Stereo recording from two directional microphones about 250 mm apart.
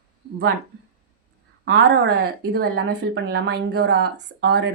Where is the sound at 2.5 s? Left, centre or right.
Right.